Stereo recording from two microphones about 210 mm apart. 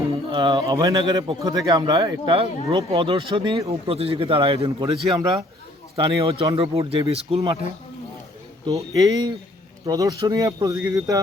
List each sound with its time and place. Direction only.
0.3 s speech: 20° right (ahead or behind)
8.6 s speech: 15° right (ahead or behind)